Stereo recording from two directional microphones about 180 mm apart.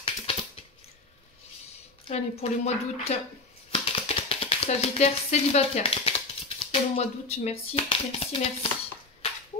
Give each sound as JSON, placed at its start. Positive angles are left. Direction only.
{"t": 0.0, "sound": "typing", "side_deg": 30}
{"t": 2.0, "sound": "speech", "side_deg": 35}